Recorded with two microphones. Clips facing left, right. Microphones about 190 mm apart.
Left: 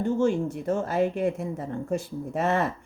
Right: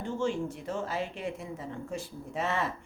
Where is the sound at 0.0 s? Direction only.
45° left (ahead or behind).